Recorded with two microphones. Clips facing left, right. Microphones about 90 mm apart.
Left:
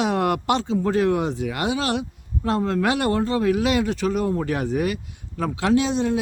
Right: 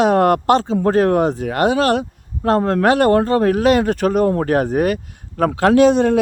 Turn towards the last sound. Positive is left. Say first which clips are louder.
# right 8 dB
turn(degrees=-55)  # may be behind; listen again after turning